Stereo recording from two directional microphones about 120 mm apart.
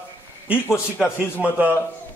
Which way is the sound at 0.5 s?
20° left (ahead or behind).